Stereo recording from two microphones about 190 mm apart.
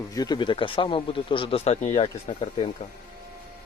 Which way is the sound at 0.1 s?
20° left (ahead or behind).